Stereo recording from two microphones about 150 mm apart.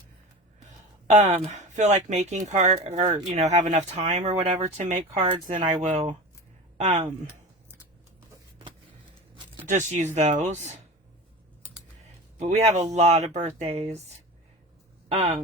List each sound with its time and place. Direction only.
1.0 s speech: 50° right (ahead or behind)
5.5 s speech: 55° right (ahead or behind)
9.6 s speech: 50° right (ahead or behind)
12.4 s speech: 50° right (ahead or behind)